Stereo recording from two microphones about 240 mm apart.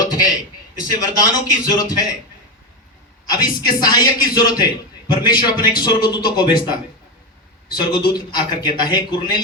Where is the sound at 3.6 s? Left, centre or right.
Centre.